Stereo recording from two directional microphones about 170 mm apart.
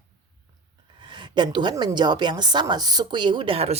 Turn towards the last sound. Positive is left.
turn(degrees=-35)  # may be behind; listen again after turning